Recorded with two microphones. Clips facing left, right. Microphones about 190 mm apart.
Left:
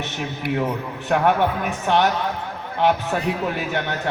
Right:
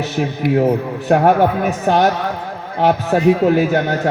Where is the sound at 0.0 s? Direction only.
40° right (ahead or behind).